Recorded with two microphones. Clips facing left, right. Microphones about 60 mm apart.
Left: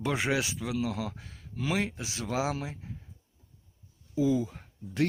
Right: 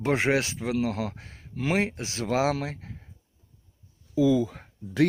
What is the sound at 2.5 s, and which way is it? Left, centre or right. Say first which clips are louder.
Speech: right 5 dB; right.